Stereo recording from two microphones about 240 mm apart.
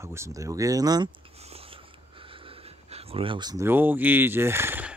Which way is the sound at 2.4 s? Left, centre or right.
Right.